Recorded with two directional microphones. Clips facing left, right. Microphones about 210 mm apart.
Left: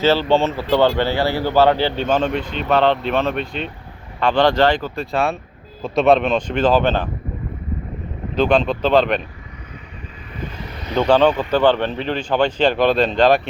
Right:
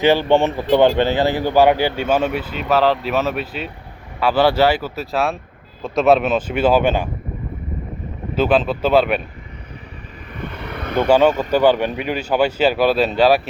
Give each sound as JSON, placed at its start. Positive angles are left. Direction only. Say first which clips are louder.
{"t": 0.0, "sound": "a man's voice", "louder": "right 1 dB", "side_deg": -15}
{"t": 8.4, "sound": "a man's voice", "louder": "even", "side_deg": -5}
{"t": 10.4, "sound": "vehicle", "louder": "right 3 dB", "side_deg": -60}
{"t": 11.0, "sound": "a man's voice", "louder": "right 1 dB", "side_deg": -10}